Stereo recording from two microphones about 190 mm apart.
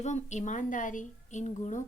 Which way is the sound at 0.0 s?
40° left (ahead or behind).